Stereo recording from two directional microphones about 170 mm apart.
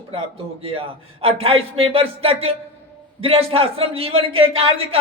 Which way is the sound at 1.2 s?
35° right (ahead or behind).